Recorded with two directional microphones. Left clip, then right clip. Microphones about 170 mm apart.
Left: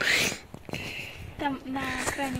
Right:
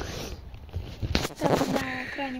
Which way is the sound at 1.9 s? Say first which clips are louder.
Left 2 dB; centre (ahead or behind).